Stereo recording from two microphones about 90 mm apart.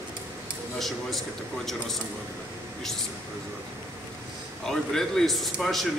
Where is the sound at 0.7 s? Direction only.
Centre (ahead or behind).